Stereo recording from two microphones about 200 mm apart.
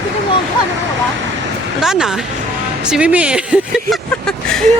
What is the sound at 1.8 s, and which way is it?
Speech, centre (ahead or behind).